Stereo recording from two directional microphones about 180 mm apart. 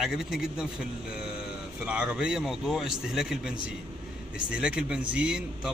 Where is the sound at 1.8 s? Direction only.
5° right (ahead or behind).